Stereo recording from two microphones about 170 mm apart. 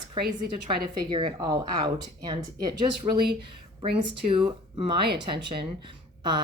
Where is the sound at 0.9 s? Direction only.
30° right (ahead or behind).